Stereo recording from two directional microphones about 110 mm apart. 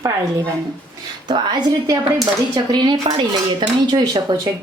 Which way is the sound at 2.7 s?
40° right (ahead or behind).